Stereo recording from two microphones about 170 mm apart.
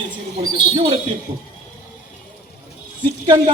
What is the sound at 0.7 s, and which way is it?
Speech, 30° right (ahead or behind).